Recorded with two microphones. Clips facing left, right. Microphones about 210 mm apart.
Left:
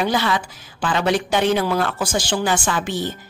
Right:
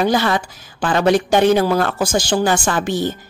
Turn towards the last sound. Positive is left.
turn(degrees=-45)  # may be behind; listen again after turning